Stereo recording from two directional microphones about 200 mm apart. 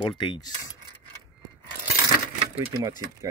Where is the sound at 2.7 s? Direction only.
20° right (ahead or behind).